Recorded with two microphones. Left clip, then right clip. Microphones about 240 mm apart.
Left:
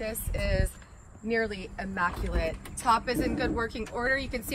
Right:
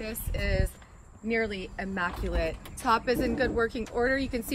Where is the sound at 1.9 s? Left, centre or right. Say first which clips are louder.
Left 1 dB; left.